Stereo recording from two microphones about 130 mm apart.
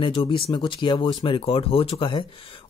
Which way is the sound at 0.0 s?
40° left (ahead or behind).